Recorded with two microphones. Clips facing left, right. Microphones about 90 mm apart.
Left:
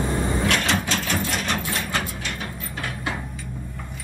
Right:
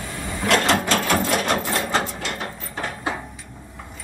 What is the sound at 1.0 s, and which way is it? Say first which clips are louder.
Sewing machine: right 5 dB; 55° right (ahead or behind).